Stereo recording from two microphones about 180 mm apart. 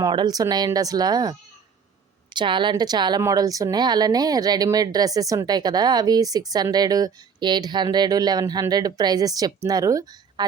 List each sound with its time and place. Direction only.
0.0 s a woman's voice: 25° right (ahead or behind)